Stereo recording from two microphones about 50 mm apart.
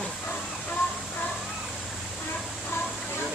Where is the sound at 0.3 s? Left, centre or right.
Left.